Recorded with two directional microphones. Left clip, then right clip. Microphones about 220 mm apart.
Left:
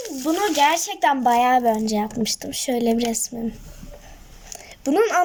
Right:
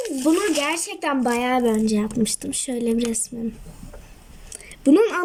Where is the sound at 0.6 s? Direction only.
40° left (ahead or behind).